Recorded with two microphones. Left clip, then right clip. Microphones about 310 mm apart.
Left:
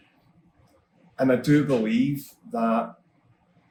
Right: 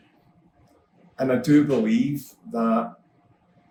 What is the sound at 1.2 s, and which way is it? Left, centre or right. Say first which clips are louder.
Speech: right 1 dB; centre.